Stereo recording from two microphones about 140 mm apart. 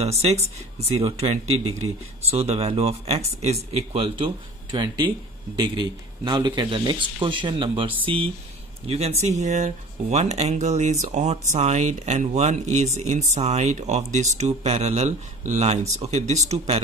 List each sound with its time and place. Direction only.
0.0 s speech: 50° right (ahead or behind)
4.7 s speech: 30° right (ahead or behind); by 16.8 s 50° right (ahead or behind)